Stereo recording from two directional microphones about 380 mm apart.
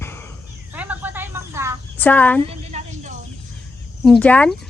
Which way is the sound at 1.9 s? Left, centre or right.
Centre.